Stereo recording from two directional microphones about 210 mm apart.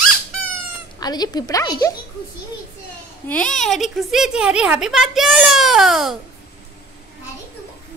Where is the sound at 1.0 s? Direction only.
20° left (ahead or behind).